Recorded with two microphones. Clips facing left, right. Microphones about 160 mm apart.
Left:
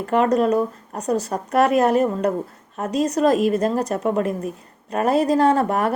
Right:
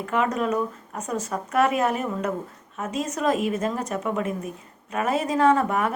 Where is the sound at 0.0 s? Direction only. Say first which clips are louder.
Left 6 dB; 35° left (ahead or behind).